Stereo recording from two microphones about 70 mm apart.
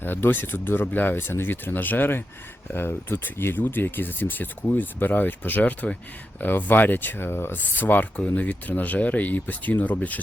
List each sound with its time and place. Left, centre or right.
0.0 s speech: left